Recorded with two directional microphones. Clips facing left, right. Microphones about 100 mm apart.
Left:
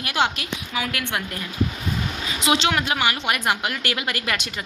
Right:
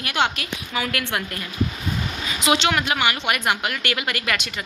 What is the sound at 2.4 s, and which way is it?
A woman's voice, 25° left (ahead or behind).